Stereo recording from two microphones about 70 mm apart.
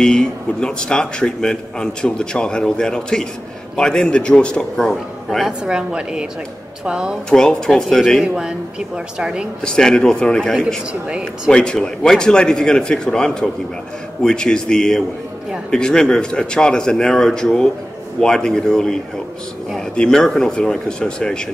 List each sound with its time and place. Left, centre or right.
0.0 s speech: centre
5.6 s speech: centre
7.2 s speech: centre
8.5 s speech: centre
9.7 s speech: centre
10.9 s speech: centre
11.5 s speech: centre
20.0 s speech: centre